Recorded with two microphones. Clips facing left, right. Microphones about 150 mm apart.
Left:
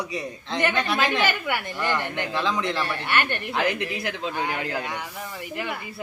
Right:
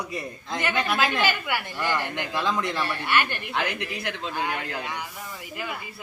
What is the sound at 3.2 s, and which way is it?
Speech, 55° left (ahead or behind).